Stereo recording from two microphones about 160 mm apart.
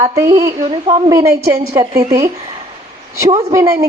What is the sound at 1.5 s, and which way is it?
Speech, 20° right (ahead or behind).